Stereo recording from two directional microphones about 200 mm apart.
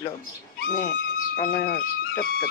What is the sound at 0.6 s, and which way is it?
Speech, 45° left (ahead or behind).